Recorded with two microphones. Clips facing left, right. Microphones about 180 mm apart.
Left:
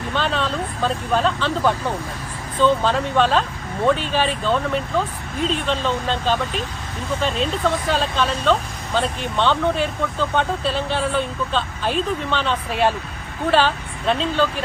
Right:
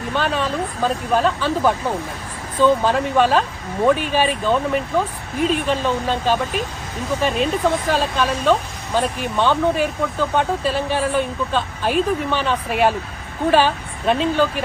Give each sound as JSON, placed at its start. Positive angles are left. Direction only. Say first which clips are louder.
{"t": 0.4, "sound": "speech", "louder": "right 2 dB", "side_deg": -10}